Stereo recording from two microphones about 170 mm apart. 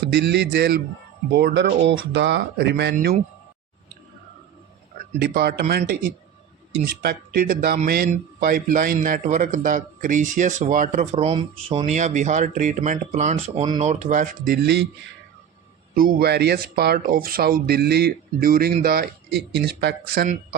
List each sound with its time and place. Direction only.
0.0 s a man's voice: 75° right (ahead or behind)
5.2 s a man's voice: 70° right (ahead or behind); by 11.9 s 30° right (ahead or behind)
11.9 s a man's voice: 45° right (ahead or behind)
14.6 s speech: 80° right
16.0 s speech: 60° right (ahead or behind)
19.6 s speech: 80° right